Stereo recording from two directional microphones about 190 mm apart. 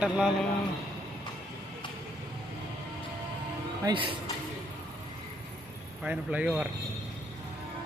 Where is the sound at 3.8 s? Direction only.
25° right (ahead or behind).